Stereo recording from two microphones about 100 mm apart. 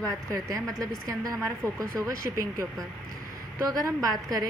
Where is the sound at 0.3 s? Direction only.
35° right (ahead or behind).